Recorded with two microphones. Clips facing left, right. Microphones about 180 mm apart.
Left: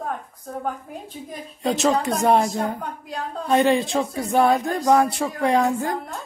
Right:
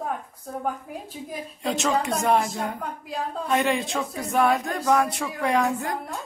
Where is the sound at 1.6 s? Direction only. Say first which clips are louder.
Left 4 dB; 35° left (ahead or behind).